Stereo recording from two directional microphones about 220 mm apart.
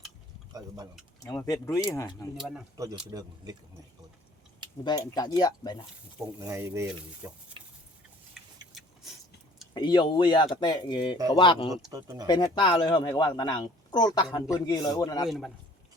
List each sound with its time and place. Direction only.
1.2 s speech: 15° left (ahead or behind)
2.7 s speech: 15° right (ahead or behind)
4.8 s speech: 20° left (ahead or behind)
6.4 s speech: 10° right (ahead or behind)
9.7 s speech: 20° left (ahead or behind)
11.9 s speech: 15° right (ahead or behind)
12.3 s speech: 20° left (ahead or behind)
15.3 s a man's voice: centre (ahead or behind)